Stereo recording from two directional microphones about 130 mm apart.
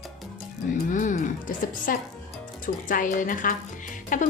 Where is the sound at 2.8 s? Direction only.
85° left.